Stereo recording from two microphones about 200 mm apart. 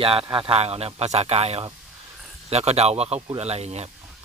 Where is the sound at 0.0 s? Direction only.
25° right (ahead or behind).